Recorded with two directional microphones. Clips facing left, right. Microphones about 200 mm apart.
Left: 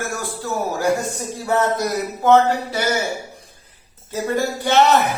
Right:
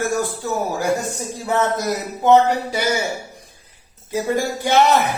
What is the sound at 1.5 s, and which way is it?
Music, 20° right (ahead or behind).